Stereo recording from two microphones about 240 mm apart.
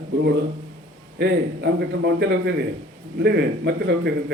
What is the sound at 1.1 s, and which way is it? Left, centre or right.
A man's voice, right.